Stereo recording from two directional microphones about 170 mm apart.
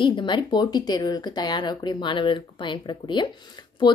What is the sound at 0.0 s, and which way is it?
A woman's voice, 30° left (ahead or behind).